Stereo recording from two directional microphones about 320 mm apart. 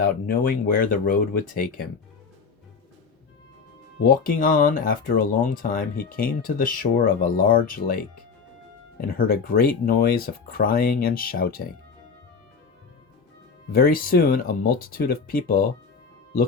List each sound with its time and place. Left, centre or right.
0.0 s speech: left
3.9 s speech: left
9.0 s speech: left
13.7 s speech: left